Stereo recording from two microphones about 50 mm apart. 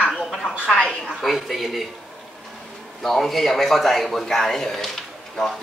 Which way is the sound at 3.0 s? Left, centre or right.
Centre.